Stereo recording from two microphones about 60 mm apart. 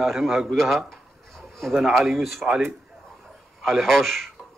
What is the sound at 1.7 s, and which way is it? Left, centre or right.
Speech, centre.